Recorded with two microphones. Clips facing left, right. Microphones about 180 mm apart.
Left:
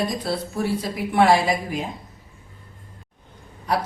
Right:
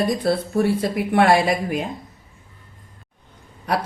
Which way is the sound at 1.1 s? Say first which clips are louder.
Right 1 dB; 60° right (ahead or behind).